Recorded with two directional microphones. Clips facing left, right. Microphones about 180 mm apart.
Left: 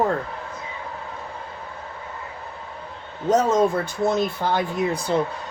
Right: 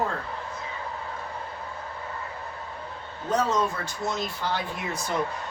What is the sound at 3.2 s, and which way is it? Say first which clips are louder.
Speech: left 6 dB; 45° left (ahead or behind).